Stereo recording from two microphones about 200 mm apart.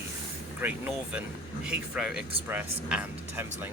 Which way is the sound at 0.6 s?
10° right (ahead or behind).